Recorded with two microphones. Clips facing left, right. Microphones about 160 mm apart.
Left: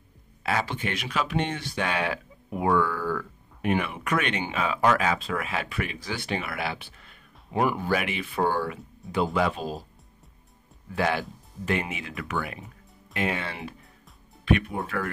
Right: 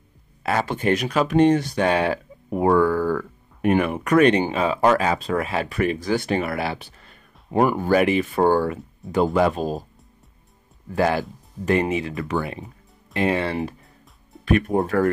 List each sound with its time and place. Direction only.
0.4 s speech: 45° right (ahead or behind)
10.9 s speech: 40° right (ahead or behind)